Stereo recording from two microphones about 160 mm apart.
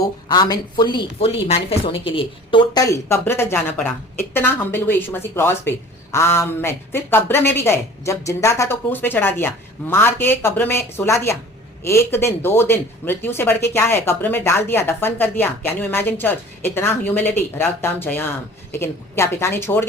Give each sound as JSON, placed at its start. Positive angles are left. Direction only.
{"t": 0.0, "sound": "speech", "side_deg": 25}